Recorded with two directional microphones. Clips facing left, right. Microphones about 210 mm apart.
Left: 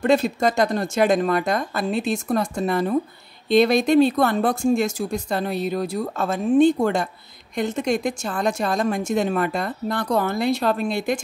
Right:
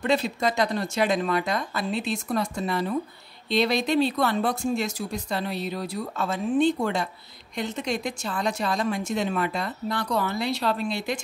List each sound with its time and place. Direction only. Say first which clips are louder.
0.0 s speech: left 5 dB; 45° left (ahead or behind)